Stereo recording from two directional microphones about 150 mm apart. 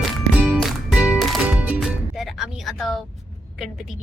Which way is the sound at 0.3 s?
Centre (ahead or behind).